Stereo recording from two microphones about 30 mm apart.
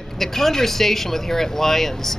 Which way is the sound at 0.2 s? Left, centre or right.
Centre.